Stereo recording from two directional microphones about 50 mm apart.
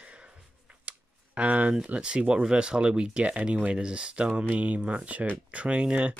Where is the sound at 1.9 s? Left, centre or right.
Right.